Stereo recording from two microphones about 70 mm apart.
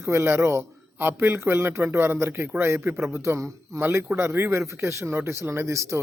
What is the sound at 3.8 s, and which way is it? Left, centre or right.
A man's voice, right.